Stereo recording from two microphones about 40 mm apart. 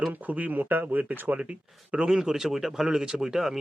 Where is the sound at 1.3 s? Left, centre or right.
Right.